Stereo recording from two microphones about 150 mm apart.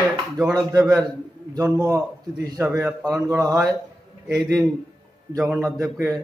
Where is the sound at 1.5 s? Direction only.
20° right (ahead or behind).